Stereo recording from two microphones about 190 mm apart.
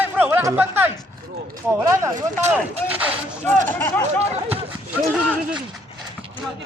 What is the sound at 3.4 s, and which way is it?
Speech, 10° left (ahead or behind).